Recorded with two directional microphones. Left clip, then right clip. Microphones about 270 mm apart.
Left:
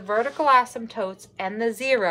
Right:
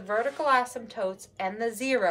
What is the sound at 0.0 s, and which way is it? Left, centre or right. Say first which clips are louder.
A woman's voice: left 5 dB; centre.